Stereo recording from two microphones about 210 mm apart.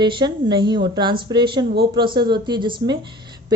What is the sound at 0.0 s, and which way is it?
A woman's voice, 20° right (ahead or behind).